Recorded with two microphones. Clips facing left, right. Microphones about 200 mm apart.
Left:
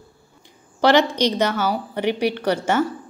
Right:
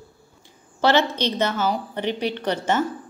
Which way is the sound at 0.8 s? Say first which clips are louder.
Left 3 dB; 15° left (ahead or behind).